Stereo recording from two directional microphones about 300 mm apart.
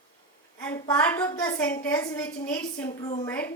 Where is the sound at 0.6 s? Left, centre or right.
Centre.